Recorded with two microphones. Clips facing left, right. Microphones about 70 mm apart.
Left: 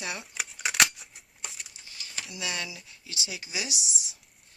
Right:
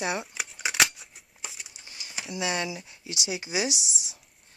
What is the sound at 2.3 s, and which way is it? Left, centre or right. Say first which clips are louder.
Speech: right 7 dB; right.